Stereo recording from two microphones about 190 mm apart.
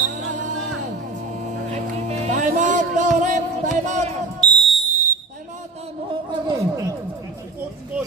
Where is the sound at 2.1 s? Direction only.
40° right (ahead or behind).